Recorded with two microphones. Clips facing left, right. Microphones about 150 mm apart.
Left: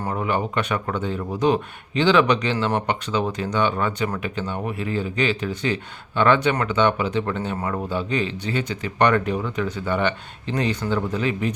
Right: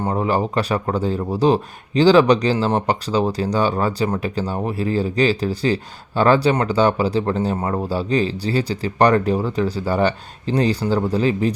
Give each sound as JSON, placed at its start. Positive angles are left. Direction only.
{"t": 0.1, "sound": "speech", "side_deg": -35}